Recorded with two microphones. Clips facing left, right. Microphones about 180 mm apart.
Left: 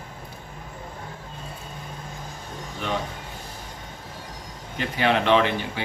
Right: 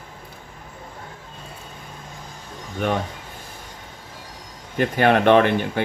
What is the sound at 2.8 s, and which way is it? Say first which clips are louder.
Speech: right 5 dB; 55° right (ahead or behind).